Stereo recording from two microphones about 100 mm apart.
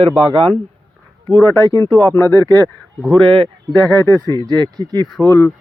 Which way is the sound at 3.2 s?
60° right (ahead or behind).